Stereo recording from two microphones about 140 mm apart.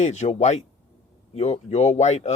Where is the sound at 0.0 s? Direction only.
55° left (ahead or behind).